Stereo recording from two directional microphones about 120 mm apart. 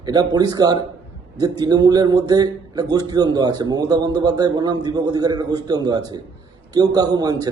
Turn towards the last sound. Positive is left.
turn(degrees=-35)  # may be behind; listen again after turning